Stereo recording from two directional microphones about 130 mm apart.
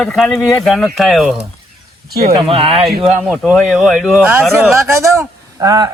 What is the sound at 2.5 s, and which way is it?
Speech, 50° right (ahead or behind).